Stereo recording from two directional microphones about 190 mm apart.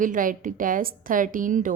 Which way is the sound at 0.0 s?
45° right (ahead or behind).